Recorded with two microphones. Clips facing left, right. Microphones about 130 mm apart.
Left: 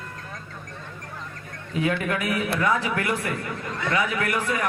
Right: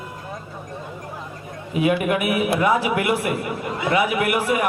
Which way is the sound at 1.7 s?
15° right (ahead or behind).